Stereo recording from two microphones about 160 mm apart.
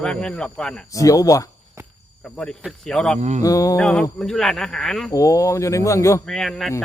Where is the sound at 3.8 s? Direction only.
5° left (ahead or behind).